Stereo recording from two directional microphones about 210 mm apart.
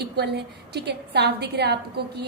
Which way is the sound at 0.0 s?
55° right (ahead or behind).